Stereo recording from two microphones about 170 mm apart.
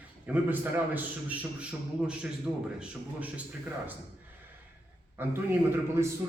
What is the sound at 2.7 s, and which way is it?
Speech, 10° right (ahead or behind).